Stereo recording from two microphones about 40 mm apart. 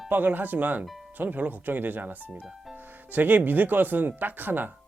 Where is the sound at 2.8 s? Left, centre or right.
Right.